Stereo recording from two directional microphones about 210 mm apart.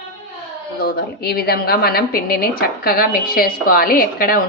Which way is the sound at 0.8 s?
45° left (ahead or behind).